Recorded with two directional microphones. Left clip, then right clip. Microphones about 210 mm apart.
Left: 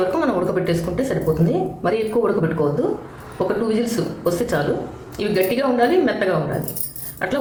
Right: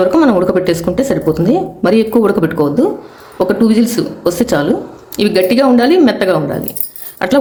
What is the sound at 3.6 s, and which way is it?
A woman's voice, 50° right (ahead or behind).